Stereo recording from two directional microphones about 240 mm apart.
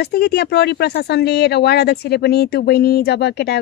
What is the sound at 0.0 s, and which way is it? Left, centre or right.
Speech, left.